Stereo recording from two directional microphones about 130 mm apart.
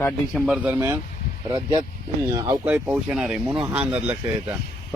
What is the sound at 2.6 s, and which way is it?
Speech, 10° right (ahead or behind).